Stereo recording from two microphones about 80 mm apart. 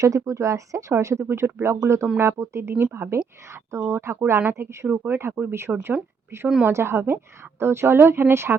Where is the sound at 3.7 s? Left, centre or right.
Right.